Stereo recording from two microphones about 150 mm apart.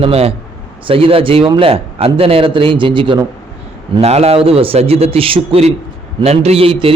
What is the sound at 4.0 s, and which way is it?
A man's voice, 45° right (ahead or behind).